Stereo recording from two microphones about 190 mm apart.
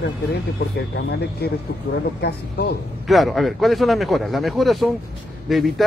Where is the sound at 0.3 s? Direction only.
60° left (ahead or behind).